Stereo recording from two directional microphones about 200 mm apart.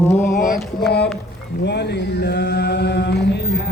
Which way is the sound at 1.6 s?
60° left (ahead or behind).